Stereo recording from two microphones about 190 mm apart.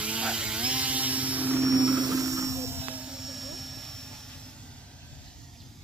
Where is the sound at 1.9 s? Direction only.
20° right (ahead or behind); by 4.1 s centre (ahead or behind).